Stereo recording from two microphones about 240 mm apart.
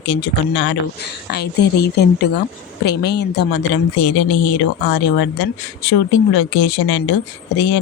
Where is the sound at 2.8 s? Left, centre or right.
Left.